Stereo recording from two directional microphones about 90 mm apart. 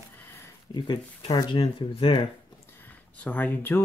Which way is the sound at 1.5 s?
80° left.